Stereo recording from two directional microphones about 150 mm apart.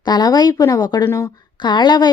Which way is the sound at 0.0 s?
30° left (ahead or behind).